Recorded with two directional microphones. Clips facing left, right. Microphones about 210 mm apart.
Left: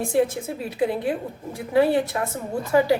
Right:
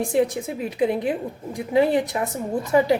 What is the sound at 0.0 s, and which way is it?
A woman's voice, 15° right (ahead or behind).